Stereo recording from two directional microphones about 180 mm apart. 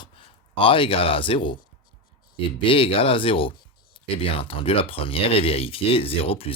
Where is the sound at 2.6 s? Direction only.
30° left (ahead or behind).